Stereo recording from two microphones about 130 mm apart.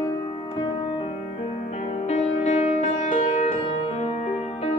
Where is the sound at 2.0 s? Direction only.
60° left (ahead or behind).